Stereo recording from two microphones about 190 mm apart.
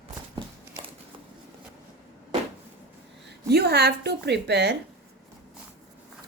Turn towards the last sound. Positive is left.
turn(degrees=-65)  # may be behind; listen again after turning